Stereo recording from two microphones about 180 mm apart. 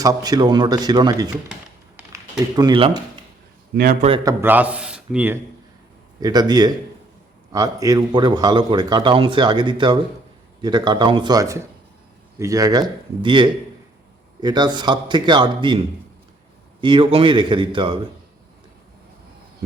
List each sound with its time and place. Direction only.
0.0 s a man's voice: 20° right (ahead or behind)
2.6 s a man's voice: 25° right (ahead or behind)
3.7 s a man's voice: 60° right (ahead or behind)
4.2 s a man's voice: 15° right (ahead or behind)
6.1 s a man's voice: 20° right (ahead or behind)
16.8 s a man's voice: 30° right (ahead or behind)